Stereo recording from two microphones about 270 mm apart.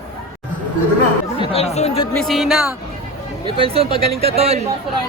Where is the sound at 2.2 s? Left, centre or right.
Centre.